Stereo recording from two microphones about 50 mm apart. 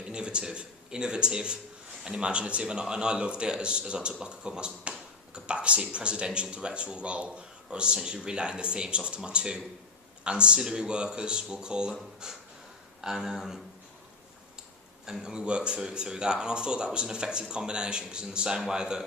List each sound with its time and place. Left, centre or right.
0.0 s speech: centre
15.2 s speech: centre